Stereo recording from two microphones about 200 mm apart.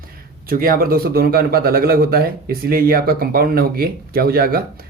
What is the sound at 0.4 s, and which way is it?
A man's voice, 45° right (ahead or behind).